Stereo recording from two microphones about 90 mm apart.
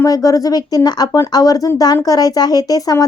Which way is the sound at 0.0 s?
40° left (ahead or behind).